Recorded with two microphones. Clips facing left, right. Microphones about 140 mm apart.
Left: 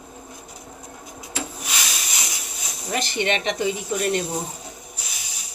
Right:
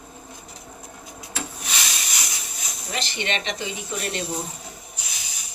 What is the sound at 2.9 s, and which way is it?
Speech, 50° left (ahead or behind).